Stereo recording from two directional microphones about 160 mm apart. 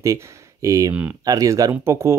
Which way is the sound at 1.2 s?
20° right (ahead or behind).